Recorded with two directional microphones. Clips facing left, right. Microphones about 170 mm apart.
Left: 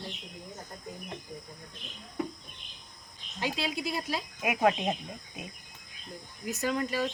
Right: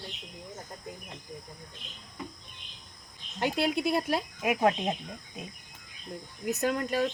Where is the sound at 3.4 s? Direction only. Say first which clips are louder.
Right 5 dB; 55° right (ahead or behind).